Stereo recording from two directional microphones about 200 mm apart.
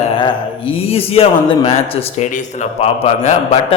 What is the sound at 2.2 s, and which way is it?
A man's voice, 40° left (ahead or behind).